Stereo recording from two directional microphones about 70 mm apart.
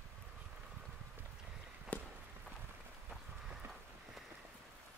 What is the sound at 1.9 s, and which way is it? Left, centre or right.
Walk, left.